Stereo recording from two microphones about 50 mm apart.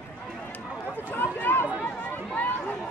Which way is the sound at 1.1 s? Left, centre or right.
Left.